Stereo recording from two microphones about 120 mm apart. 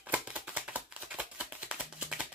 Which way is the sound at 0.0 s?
15° right (ahead or behind).